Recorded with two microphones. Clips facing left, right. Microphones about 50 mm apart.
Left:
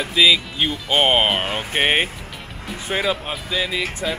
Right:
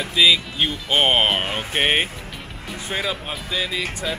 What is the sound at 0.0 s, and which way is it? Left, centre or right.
Speech, centre.